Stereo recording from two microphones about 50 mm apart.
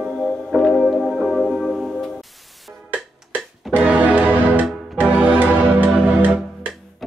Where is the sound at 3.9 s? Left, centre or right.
Right.